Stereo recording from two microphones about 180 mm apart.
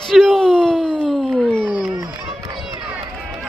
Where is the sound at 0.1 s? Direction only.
Centre (ahead or behind).